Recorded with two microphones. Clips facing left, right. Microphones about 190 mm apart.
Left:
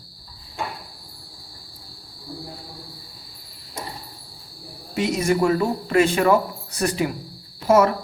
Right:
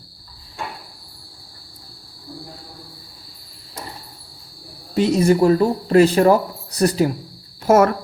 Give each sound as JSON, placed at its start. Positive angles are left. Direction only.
{"t": 4.9, "sound": "speech", "side_deg": -35}
{"t": 7.7, "sound": "speech", "side_deg": -50}